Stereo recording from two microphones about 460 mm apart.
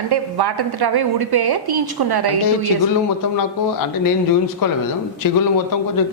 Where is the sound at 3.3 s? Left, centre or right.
Left.